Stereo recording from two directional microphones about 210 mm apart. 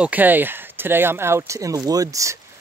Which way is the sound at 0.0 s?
10° right (ahead or behind).